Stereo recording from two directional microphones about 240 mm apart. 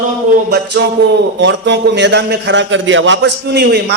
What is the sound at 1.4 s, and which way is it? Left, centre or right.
A man's voice, right.